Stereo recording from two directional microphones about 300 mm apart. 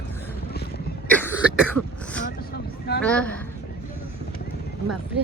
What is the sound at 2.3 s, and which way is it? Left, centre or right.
Vehicle, left.